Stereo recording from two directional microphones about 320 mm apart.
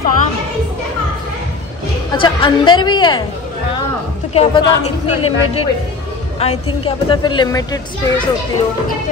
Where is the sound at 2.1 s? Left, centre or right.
Centre.